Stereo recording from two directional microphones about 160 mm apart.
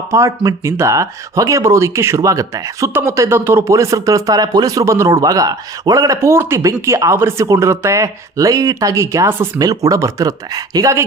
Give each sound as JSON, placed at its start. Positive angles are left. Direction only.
{"t": 0.1, "sound": "speech", "side_deg": -20}